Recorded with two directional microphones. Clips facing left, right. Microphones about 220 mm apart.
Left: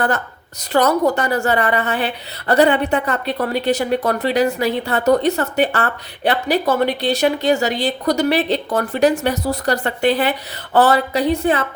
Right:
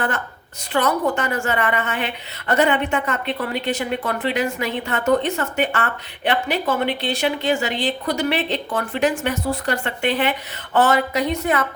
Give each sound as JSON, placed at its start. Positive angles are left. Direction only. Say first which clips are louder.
{"t": 0.7, "sound": "a woman's voice", "louder": "left 5 dB", "side_deg": 40}